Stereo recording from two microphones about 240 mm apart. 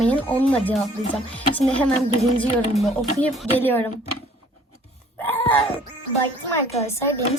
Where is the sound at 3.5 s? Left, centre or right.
Centre.